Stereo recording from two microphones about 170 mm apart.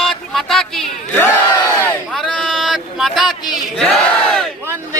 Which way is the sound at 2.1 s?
Centre (ahead or behind).